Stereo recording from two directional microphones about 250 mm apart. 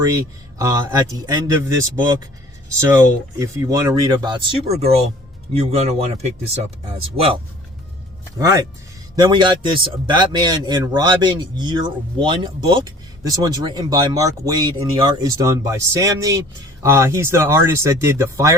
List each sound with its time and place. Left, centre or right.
0.0 s speech: centre
2.8 s speech: centre
8.4 s speech: centre